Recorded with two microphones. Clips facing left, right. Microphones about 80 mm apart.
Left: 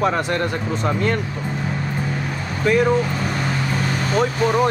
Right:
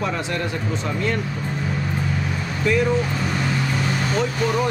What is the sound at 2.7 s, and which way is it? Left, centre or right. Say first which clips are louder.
Speech: left 3 dB; left.